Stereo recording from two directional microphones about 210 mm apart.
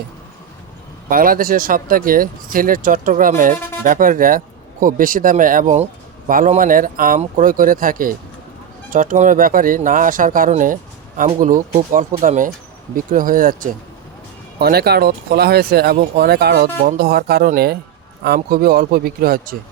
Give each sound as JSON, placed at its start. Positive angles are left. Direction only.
{"t": 1.1, "sound": "speech", "side_deg": -40}